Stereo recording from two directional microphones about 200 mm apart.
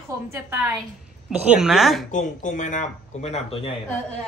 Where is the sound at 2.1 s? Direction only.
40° left (ahead or behind).